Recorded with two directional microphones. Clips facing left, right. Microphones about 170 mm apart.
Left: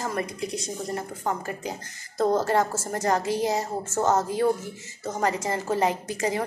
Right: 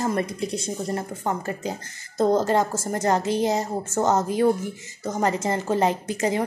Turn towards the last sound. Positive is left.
turn(degrees=-25)  # may be behind; listen again after turning